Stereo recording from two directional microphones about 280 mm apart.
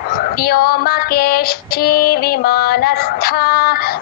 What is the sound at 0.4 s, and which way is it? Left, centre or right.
Female singing, left.